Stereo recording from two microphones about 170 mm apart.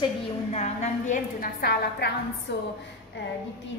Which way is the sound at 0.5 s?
45° left (ahead or behind).